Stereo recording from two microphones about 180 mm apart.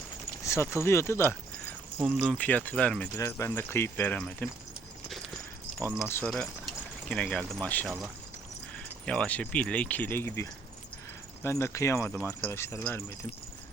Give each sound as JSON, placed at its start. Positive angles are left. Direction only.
{"t": 0.4, "sound": "speech", "side_deg": 15}
{"t": 2.0, "sound": "speech", "side_deg": -5}
{"t": 2.4, "sound": "speech", "side_deg": 10}
{"t": 5.0, "sound": "a sound", "side_deg": 0}
{"t": 6.1, "sound": "speech", "side_deg": 15}